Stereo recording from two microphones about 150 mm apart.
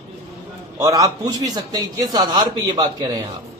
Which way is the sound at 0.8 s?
20° right (ahead or behind).